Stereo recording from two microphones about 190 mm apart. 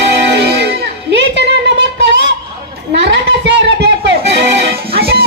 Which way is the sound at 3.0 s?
70° right (ahead or behind).